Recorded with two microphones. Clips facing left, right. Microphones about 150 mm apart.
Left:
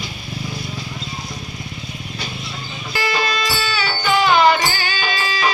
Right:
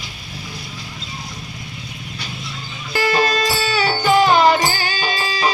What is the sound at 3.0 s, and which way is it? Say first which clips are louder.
Music: right 4 dB; 45° right (ahead or behind).